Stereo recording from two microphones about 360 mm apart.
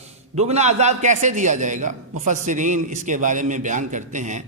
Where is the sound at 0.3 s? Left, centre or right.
Centre.